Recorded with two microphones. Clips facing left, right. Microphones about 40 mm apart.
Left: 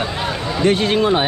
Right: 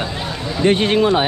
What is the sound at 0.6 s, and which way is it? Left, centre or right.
Speech, right.